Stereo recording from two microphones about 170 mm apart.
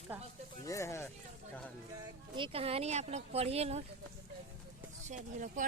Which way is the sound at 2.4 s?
35° right (ahead or behind).